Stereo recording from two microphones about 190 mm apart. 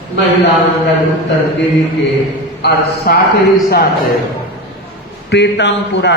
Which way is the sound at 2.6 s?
60° left (ahead or behind).